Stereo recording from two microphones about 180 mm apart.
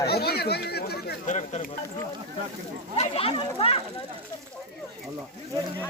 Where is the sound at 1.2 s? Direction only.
40° left (ahead or behind).